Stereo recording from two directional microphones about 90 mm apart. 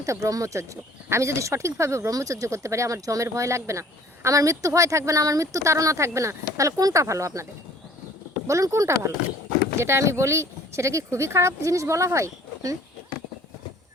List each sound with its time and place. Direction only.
0.0 s speech: 40° right (ahead or behind)
8.4 s speech: 35° right (ahead or behind)